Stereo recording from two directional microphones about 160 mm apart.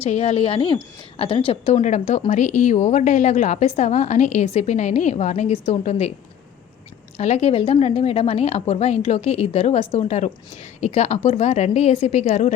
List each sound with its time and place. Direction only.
0.0 s a woman's voice: 40° left (ahead or behind)
7.2 s a woman's voice: 45° left (ahead or behind)